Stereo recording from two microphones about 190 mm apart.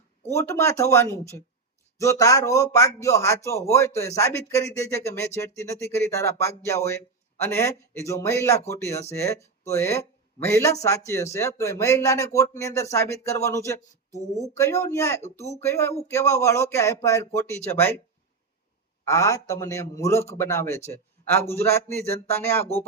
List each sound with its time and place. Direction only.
0.3 s speech: 15° left (ahead or behind)
19.0 s speech: 15° left (ahead or behind)